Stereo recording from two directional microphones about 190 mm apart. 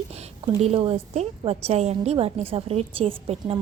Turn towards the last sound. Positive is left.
turn(degrees=-30)  # may be behind; listen again after turning